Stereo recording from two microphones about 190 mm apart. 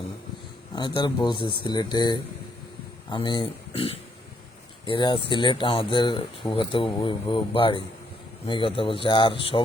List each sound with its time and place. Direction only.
0.8 s speech: 25° left (ahead or behind)